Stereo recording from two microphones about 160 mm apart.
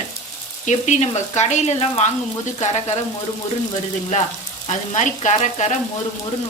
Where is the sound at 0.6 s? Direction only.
45° left (ahead or behind).